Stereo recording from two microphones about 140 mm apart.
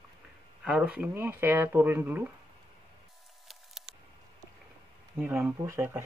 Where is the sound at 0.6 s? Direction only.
5° right (ahead or behind).